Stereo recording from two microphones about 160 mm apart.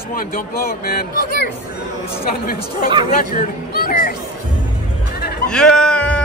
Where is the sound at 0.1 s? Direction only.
60° left (ahead or behind).